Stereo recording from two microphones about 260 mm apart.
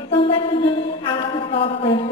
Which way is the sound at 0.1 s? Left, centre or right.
Left.